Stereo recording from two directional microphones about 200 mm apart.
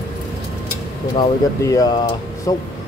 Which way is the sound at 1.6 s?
15° left (ahead or behind).